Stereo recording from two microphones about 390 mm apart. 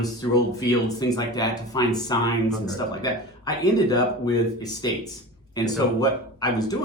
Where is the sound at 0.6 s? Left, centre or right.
Centre.